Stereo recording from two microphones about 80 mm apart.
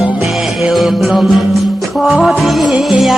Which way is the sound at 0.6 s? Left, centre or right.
Centre.